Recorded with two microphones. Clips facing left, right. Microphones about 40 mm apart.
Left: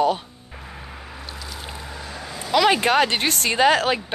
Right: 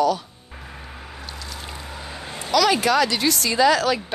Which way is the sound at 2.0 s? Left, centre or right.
Centre.